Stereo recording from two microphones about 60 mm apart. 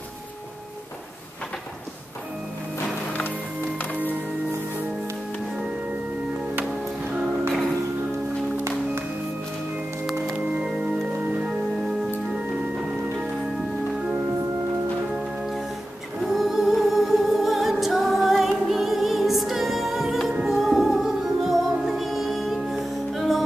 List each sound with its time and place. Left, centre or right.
3.1 s music: left
10.4 s music: right
15.1 s music: centre